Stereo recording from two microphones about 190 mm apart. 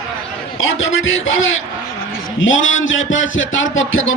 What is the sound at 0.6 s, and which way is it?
A man's voice, 90° left.